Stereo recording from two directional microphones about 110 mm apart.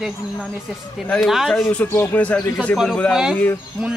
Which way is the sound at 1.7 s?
15° left (ahead or behind).